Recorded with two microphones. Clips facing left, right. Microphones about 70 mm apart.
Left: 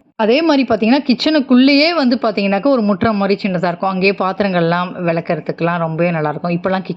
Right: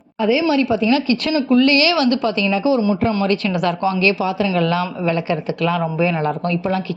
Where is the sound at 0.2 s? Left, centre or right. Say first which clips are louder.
Left 4 dB; left.